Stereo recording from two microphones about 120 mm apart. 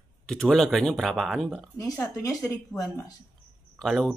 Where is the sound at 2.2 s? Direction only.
30° left (ahead or behind).